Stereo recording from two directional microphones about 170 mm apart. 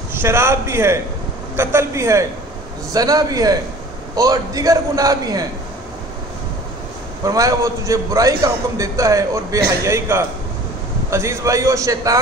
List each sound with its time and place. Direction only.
0.1 s a man's voice: 15° right (ahead or behind)
7.2 s a man's voice: 20° right (ahead or behind)